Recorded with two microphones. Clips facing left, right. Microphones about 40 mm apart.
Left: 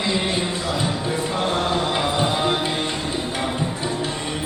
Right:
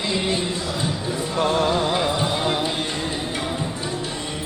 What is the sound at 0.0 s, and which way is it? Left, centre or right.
Music, centre.